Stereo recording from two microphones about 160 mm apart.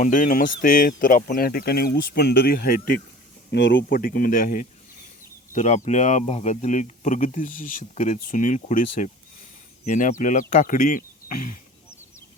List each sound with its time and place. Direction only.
0.0 s speech: 55° left (ahead or behind)
3.5 s speech: 90° left; by 4.6 s 60° left (ahead or behind)
5.5 s speech: 45° left (ahead or behind)